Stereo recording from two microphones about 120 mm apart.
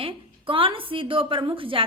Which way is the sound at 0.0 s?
50° right (ahead or behind).